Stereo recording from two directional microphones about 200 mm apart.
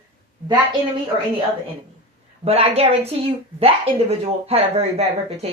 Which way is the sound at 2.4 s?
30° right (ahead or behind).